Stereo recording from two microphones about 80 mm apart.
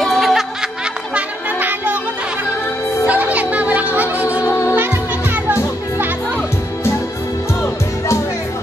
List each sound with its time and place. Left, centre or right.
0.0 s music: centre
1.1 s music: right
3.1 s music: centre
4.5 s music: left
5.3 s music: right